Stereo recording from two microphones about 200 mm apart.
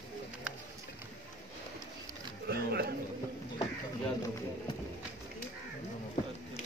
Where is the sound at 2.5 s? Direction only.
50° right (ahead or behind).